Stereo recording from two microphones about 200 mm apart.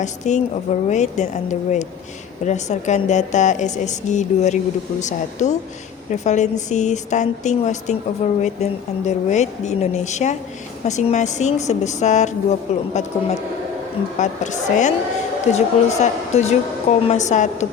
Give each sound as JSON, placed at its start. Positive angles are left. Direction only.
{"t": 0.0, "sound": "a woman's voice", "side_deg": 35}
{"t": 14.2, "sound": "a woman's voice", "side_deg": 35}